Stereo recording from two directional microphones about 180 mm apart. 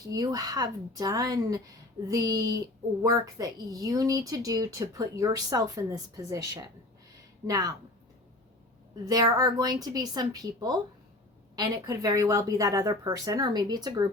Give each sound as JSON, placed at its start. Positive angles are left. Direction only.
{"t": 0.1, "sound": "speech", "side_deg": -20}
{"t": 9.0, "sound": "speech", "side_deg": -20}